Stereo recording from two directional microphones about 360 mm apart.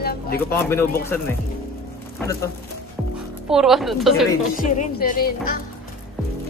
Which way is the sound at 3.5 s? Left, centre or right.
Centre.